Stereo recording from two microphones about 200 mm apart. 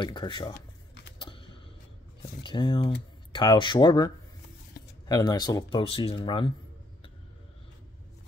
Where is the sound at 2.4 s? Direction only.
25° left (ahead or behind).